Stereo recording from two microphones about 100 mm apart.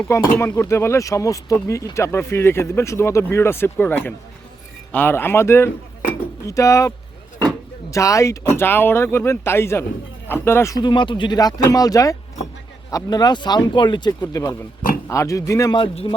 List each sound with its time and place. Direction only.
0.1 s speech: 30° left (ahead or behind)
10.8 s speech: 50° left (ahead or behind)
14.2 s speech: 30° left (ahead or behind)
16.1 s speech: 50° left (ahead or behind)